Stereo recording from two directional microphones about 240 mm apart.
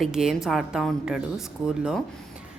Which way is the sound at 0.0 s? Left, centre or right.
Centre.